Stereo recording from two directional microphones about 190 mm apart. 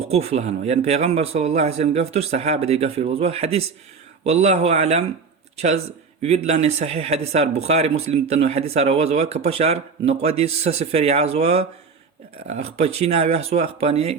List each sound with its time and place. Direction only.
0.1 s speech: 35° right (ahead or behind)